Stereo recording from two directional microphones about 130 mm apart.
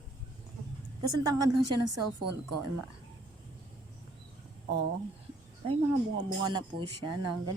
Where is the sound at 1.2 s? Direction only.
30° right (ahead or behind).